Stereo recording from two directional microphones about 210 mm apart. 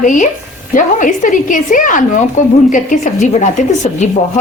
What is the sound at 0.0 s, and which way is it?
A woman's voice, 35° left (ahead or behind).